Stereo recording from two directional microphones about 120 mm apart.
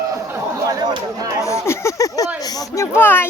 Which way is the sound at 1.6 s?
25° left (ahead or behind).